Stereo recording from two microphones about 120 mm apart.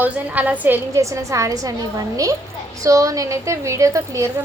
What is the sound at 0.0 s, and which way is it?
A woman's voice, 15° right (ahead or behind).